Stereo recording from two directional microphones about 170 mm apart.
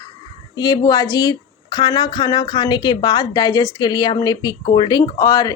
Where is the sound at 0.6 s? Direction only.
25° left (ahead or behind).